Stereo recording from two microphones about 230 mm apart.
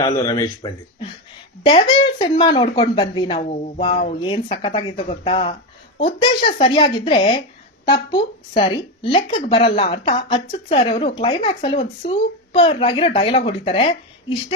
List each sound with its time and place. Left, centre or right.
0.0 s speech: centre